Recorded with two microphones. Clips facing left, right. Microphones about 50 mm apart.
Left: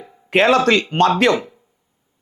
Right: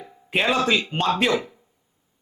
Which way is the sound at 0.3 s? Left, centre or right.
Left.